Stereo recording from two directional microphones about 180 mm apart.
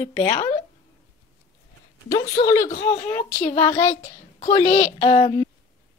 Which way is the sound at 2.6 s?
45° left (ahead or behind).